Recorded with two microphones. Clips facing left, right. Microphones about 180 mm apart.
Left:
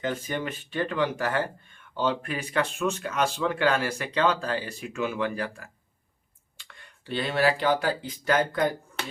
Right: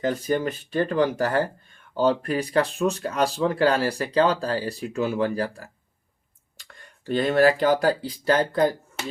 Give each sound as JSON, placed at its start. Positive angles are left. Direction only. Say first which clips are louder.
{"t": 0.0, "sound": "speech", "louder": "right 6 dB", "side_deg": -40}